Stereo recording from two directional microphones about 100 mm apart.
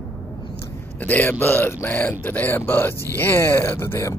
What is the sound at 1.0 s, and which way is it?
Speech, 15° left (ahead or behind).